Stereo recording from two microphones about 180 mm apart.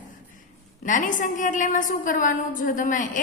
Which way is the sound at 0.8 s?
45° left (ahead or behind).